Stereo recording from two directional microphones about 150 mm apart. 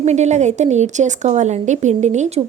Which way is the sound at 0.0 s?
50° right (ahead or behind).